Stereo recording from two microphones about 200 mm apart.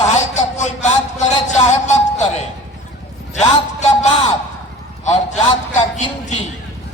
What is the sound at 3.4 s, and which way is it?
Speech, 35° left (ahead or behind).